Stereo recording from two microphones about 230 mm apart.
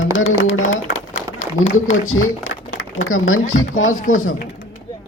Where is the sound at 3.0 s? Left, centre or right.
Left.